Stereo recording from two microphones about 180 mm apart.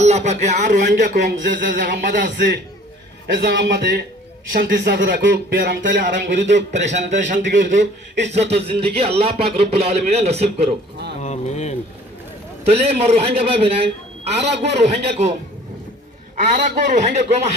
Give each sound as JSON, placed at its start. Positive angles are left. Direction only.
{"t": 0.0, "sound": "speech", "side_deg": -40}
{"t": 1.1, "sound": "speech", "side_deg": -75}
{"t": 1.7, "sound": "a man's voice", "side_deg": -65}
{"t": 6.1, "sound": "a man's voice", "side_deg": -80}
{"t": 6.7, "sound": "a man's voice", "side_deg": -40}
{"t": 8.4, "sound": "speech", "side_deg": -65}
{"t": 8.8, "sound": "a man's voice", "side_deg": -35}
{"t": 11.2, "sound": "speech", "side_deg": 40}
{"t": 12.6, "sound": "a man's voice", "side_deg": -35}
{"t": 14.3, "sound": "a man's voice", "side_deg": -70}
{"t": 14.6, "sound": "a man's voice", "side_deg": -40}
{"t": 16.4, "sound": "a man's voice", "side_deg": -45}